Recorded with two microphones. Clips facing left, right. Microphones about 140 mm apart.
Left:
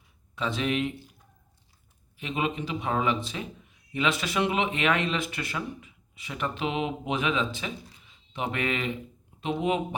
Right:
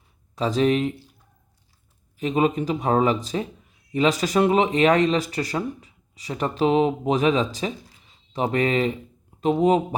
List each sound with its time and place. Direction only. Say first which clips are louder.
0.3 s speech: right 8 dB; 35° right (ahead or behind)
2.1 s speech: right 9 dB; 40° right (ahead or behind)